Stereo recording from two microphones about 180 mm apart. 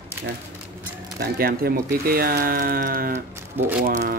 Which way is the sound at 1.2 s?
55° right (ahead or behind).